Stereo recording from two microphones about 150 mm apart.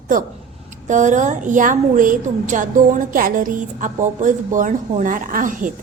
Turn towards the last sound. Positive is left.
turn(degrees=-65)  # may be behind; listen again after turning